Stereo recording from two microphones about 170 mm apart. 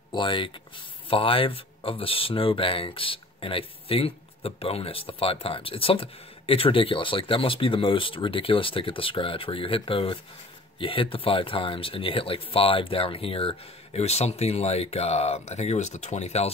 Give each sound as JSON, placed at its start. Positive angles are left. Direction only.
{"t": 0.1, "sound": "speech", "side_deg": 30}